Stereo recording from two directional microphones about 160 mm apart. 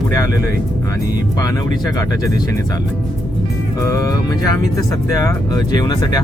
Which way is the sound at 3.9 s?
20° left (ahead or behind).